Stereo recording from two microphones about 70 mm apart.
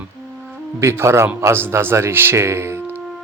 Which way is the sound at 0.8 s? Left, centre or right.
Right.